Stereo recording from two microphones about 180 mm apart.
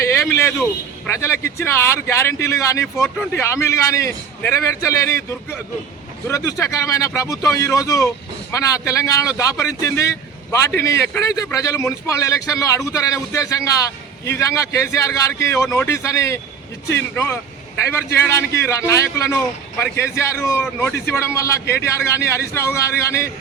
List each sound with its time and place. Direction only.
0.1 s a man's voice: 15° left (ahead or behind)
18.3 s a man's voice: 15° left (ahead or behind)